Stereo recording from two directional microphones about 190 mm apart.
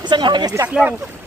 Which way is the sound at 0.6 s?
5° right (ahead or behind).